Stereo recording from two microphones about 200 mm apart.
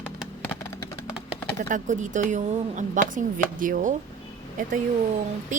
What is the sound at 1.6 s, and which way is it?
Speech, 40° right (ahead or behind).